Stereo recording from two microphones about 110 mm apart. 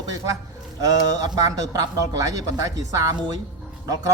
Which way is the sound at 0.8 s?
35° right (ahead or behind).